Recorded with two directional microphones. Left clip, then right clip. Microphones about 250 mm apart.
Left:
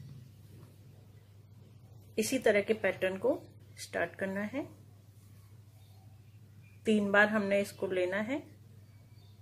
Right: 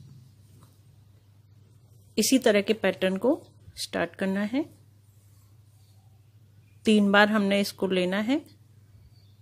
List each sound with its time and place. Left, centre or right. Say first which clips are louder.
2.3 s speech: right 6 dB; right
6.8 s speech: right 6 dB; right